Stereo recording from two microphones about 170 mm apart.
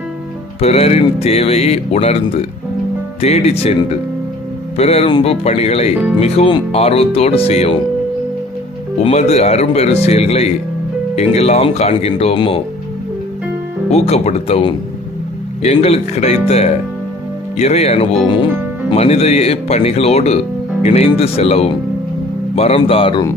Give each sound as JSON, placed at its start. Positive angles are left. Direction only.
{"t": 0.6, "sound": "speech", "side_deg": 40}
{"t": 9.0, "sound": "speech", "side_deg": 40}
{"t": 13.9, "sound": "speech", "side_deg": 40}